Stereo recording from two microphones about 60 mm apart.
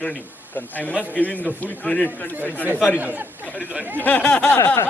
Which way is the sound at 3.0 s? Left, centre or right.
Right.